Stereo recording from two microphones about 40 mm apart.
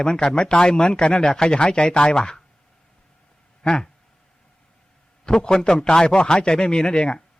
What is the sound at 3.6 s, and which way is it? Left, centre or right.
Speech, centre.